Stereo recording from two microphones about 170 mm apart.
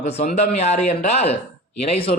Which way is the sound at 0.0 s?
40° left (ahead or behind).